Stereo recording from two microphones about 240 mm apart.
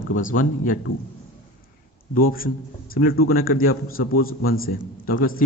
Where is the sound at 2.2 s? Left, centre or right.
Left.